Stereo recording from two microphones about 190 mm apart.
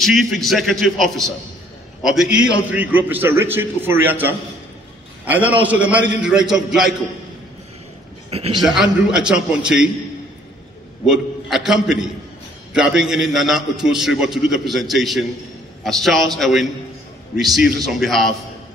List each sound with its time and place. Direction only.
0.0 s a man's voice: centre (ahead or behind)
8.3 s a man's voice: 30° right (ahead or behind)
8.6 s a man's voice: 5° right (ahead or behind)
11.1 s a man's voice: centre (ahead or behind)